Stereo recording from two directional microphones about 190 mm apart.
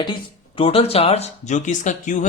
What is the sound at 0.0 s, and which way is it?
Speech, 25° left (ahead or behind).